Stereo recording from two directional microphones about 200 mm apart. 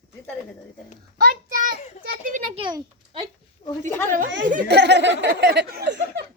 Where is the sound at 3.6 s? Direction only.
35° left (ahead or behind).